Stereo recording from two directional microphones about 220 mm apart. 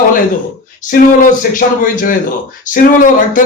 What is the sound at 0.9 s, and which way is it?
A man's voice, 40° left (ahead or behind).